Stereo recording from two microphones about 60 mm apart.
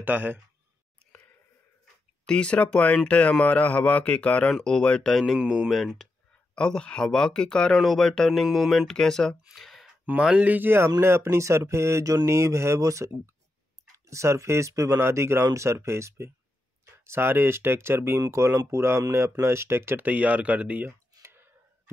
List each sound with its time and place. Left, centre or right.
0.0 s speech: right
2.2 s speech: centre
5.4 s speech: centre
6.5 s speech: centre
9.6 s a sound: centre
10.1 s speech: right
15.0 s speech: right
18.3 s speech: right
18.9 s speech: right
19.4 s speech: right
20.0 s speech: right
21.2 s a sound: right